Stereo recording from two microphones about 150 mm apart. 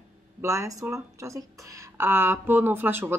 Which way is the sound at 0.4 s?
20° right (ahead or behind).